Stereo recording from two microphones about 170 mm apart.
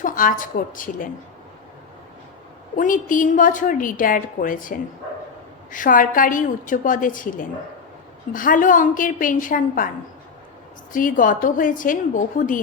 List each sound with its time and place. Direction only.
0.0 s a woman's voice: 50° left (ahead or behind)
2.7 s a woman's voice: 50° left (ahead or behind)
10.9 s a woman's voice: 50° left (ahead or behind)